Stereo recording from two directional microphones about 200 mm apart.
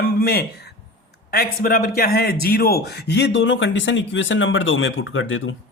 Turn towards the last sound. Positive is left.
turn(degrees=80)